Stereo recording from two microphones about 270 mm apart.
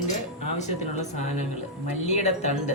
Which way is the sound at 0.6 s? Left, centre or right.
Left.